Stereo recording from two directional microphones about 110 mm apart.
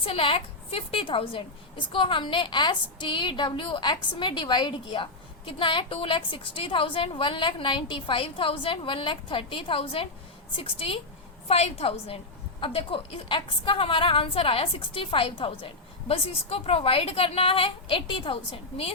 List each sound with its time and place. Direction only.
0.0 s a woman's voice: 55° left (ahead or behind)